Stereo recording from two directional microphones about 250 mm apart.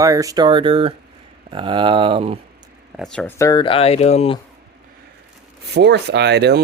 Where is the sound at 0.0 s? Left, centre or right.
Centre.